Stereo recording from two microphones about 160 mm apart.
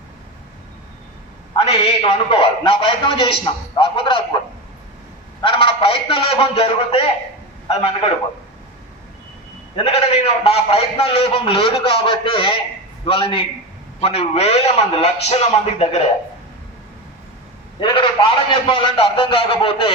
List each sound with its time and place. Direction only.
1.5 s a man's voice: 35° left (ahead or behind)
5.4 s a man's voice: 30° left (ahead or behind)
9.7 s a man's voice: 40° left (ahead or behind)
17.7 s a man's voice: 30° left (ahead or behind)